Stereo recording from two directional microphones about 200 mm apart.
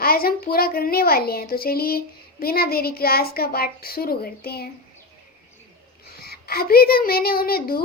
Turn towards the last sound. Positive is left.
turn(degrees=50)  # may be behind; listen again after turning